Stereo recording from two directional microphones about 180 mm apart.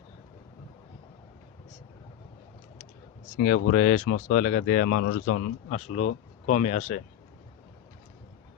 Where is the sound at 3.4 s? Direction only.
50° left (ahead or behind).